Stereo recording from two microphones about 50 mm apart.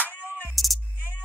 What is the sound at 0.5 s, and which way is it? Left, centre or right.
Music, centre.